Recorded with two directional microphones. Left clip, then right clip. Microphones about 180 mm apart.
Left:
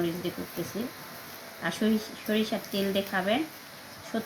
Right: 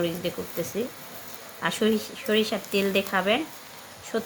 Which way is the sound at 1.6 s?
50° right (ahead or behind).